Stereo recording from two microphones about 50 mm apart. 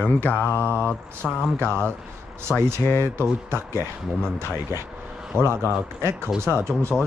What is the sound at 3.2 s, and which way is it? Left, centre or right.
Speech, right.